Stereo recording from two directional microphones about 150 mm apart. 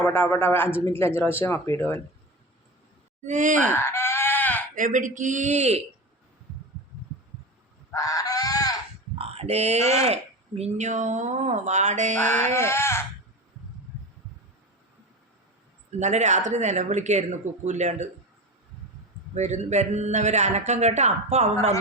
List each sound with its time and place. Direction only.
0.0 s a man's voice: 10° left (ahead or behind)
3.2 s a man's voice: 55° right (ahead or behind)
3.7 s sheep: 15° left (ahead or behind)
4.7 s a man's voice: 60° right (ahead or behind)
7.9 s goose: 25° left (ahead or behind)
9.1 s speech: 40° right (ahead or behind)
12.5 s speech: 15° left (ahead or behind)
16.0 s speech: 50° right (ahead or behind)
19.3 s speech: 50° right (ahead or behind)